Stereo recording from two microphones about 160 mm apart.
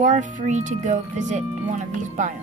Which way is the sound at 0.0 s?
55° right (ahead or behind).